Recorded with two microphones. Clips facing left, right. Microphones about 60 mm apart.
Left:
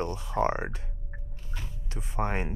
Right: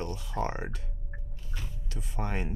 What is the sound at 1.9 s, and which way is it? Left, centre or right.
Speech, left.